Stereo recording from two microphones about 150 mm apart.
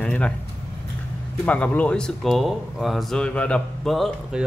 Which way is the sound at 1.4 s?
10° left (ahead or behind).